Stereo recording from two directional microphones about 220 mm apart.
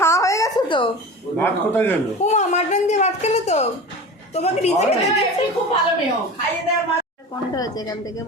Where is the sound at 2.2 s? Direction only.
30° left (ahead or behind).